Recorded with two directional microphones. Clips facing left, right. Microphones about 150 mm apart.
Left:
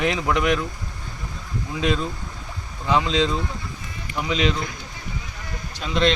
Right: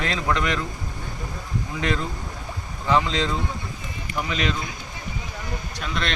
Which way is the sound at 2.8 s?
15° left (ahead or behind).